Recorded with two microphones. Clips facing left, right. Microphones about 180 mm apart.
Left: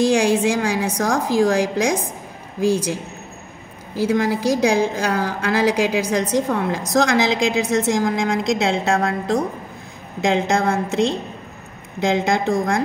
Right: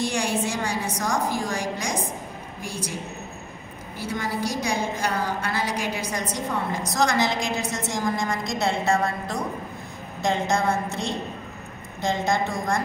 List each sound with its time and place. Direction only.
0.0 s a woman's voice: 90° left